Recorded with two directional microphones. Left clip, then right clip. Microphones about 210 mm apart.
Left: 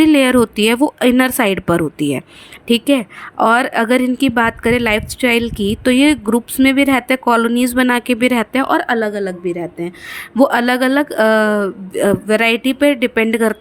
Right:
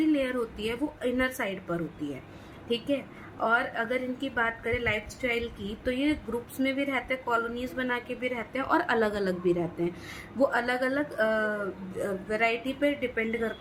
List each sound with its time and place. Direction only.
0.0 s a woman's voice: 50° left (ahead or behind)
8.6 s a woman's voice: 35° left (ahead or behind)
10.2 s a woman's voice: 45° left (ahead or behind)